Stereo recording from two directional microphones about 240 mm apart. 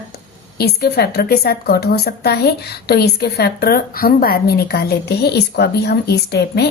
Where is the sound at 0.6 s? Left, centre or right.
Left.